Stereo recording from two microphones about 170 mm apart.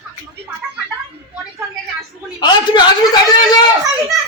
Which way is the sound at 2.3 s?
25° left (ahead or behind).